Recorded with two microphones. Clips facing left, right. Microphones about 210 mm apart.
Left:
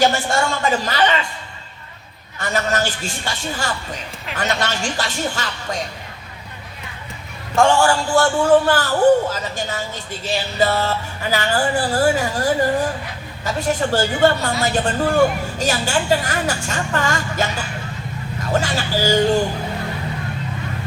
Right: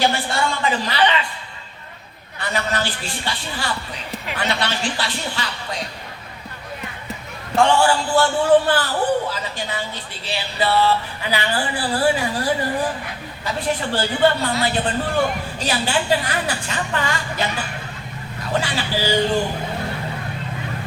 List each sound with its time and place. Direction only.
0.0 s a woman's voice: 45° left (ahead or behind)
2.4 s a woman's voice: 45° left (ahead or behind)
7.5 s a woman's voice: 45° left (ahead or behind)
18.5 s a woman's voice: 45° left (ahead or behind)